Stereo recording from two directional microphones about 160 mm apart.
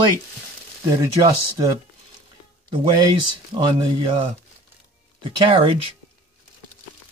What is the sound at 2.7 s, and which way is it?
Speech, 30° right (ahead or behind).